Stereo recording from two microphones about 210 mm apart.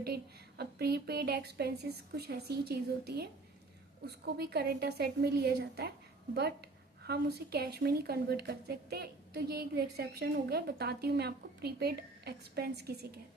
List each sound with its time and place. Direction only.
0.0 s a woman's voice: 50° right (ahead or behind)
7.0 s a woman's voice: 50° right (ahead or behind)